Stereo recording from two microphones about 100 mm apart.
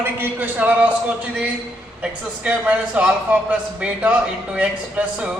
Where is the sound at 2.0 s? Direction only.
15° right (ahead or behind).